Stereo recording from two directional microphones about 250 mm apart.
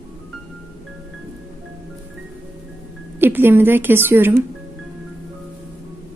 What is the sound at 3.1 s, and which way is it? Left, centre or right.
Speech, centre.